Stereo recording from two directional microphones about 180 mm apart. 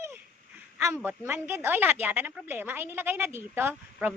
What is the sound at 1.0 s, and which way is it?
A woman's voice, 15° right (ahead or behind).